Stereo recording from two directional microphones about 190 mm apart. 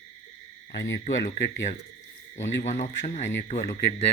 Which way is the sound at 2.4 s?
40° left (ahead or behind).